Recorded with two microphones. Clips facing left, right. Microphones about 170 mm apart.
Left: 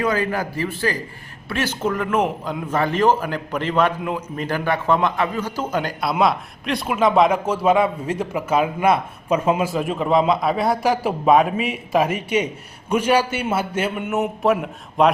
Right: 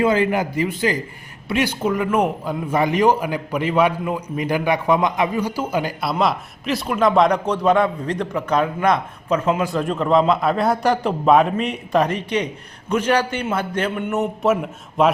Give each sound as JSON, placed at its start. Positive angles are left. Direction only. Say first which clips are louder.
{"t": 0.0, "sound": "a man's voice", "louder": "right 4 dB", "side_deg": -25}